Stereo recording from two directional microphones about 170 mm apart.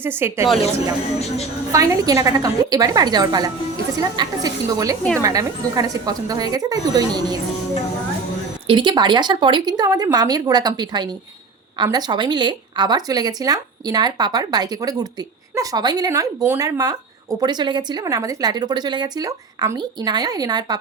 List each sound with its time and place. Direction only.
0.0 s a woman's voice: 15° right (ahead or behind)
1.7 s a woman's voice: 20° right (ahead or behind)
8.6 s a woman's voice: 30° right (ahead or behind)